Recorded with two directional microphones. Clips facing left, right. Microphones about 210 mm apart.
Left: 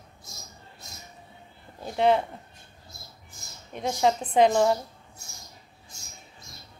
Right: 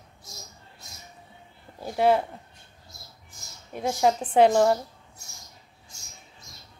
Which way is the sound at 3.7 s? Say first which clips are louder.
Right 1 dB; 5° right (ahead or behind).